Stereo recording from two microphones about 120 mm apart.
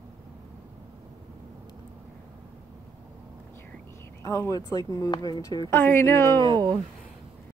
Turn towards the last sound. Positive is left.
turn(degrees=-35)  # may be behind; listen again after turning